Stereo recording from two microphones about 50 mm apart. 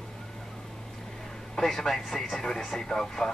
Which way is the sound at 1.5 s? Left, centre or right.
Centre.